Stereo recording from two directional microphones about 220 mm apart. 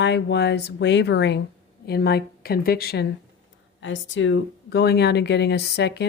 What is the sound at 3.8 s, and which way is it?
Speech, 55° left (ahead or behind).